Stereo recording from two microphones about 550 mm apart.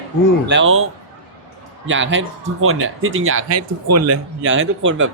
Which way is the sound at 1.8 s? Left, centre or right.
Right.